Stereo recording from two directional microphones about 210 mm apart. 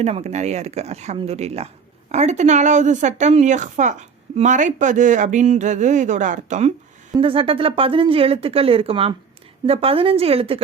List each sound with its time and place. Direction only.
0.0 s speech: 30° right (ahead or behind)